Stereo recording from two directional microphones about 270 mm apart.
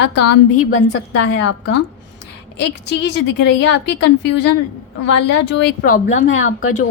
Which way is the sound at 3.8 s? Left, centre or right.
Left.